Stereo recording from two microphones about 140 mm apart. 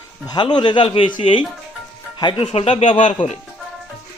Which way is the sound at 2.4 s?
45° left (ahead or behind).